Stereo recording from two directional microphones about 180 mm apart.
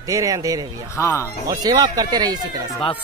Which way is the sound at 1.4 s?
20° right (ahead or behind).